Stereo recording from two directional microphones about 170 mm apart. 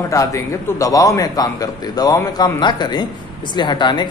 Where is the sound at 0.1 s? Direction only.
20° left (ahead or behind).